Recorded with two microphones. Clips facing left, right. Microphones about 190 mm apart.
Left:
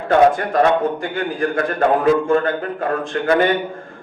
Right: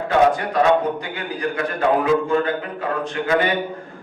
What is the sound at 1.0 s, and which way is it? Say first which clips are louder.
A man's voice: left 5 dB; 45° left (ahead or behind).